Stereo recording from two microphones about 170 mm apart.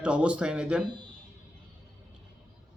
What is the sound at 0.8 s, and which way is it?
Speech, 25° right (ahead or behind).